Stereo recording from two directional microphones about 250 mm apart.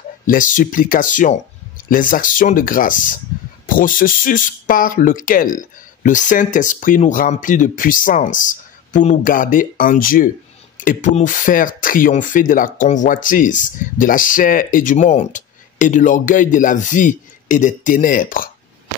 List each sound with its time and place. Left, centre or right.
0.3 s speech: left